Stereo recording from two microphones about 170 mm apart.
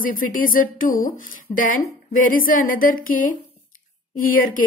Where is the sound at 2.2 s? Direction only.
55° left (ahead or behind).